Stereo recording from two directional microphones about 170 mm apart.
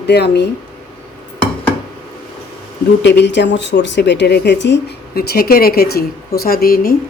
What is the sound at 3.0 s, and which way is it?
Speech, 90° left.